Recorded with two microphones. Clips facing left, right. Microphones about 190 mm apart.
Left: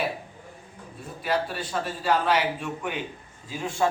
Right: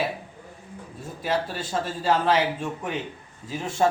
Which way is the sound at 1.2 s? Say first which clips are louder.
Even; 25° right (ahead or behind).